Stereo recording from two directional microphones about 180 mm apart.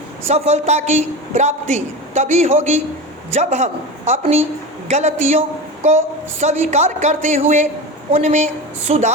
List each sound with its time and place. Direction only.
0.3 s a man's voice: 35° right (ahead or behind)
6.4 s a man's voice: 40° right (ahead or behind)